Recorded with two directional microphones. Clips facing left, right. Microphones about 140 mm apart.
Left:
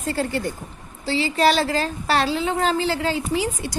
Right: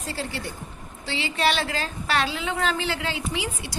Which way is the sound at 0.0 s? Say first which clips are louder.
Left 8 dB; 50° left (ahead or behind).